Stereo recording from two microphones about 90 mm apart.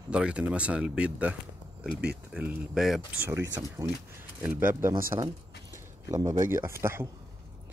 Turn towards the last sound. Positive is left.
turn(degrees=-30)  # may be behind; listen again after turning